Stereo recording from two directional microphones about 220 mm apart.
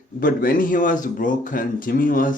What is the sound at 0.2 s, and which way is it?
Speech, 40° left (ahead or behind).